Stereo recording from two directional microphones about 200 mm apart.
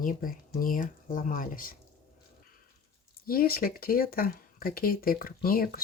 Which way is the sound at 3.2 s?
45° left (ahead or behind).